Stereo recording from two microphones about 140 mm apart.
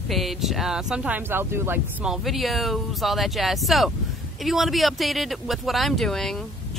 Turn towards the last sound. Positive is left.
turn(degrees=5)  # may be behind; listen again after turning